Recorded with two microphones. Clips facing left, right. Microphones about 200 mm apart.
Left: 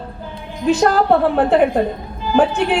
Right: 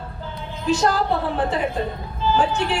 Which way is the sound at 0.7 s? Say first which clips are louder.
Left 6 dB; 60° left (ahead or behind).